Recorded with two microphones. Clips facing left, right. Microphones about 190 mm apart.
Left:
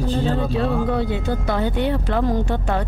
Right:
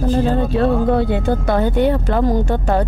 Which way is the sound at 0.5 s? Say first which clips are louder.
Right 5 dB; 55° right (ahead or behind).